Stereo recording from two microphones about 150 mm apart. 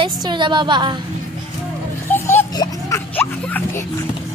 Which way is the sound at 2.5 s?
25° left (ahead or behind).